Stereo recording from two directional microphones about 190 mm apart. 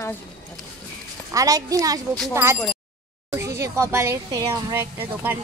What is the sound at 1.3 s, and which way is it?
A child's voice, 20° right (ahead or behind).